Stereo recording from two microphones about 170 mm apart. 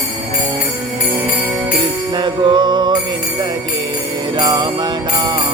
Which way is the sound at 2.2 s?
25° right (ahead or behind).